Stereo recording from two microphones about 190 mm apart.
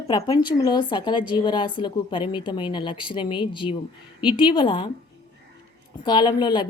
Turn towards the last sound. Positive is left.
turn(degrees=25)  # may be behind; listen again after turning